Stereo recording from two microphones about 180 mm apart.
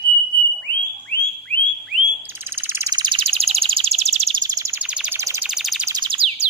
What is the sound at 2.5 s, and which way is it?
Bird, 10° right (ahead or behind).